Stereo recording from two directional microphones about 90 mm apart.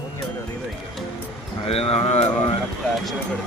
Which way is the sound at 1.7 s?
90° left.